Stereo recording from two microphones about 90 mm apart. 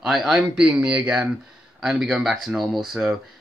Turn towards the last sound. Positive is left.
turn(degrees=0)  # may be behind; listen again after turning